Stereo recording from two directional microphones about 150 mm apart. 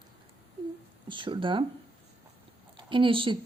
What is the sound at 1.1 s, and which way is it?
Speech, 35° right (ahead or behind).